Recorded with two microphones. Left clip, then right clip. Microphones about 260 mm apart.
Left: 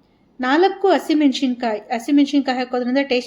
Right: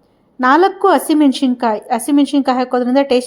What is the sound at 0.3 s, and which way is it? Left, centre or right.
A woman's voice, right.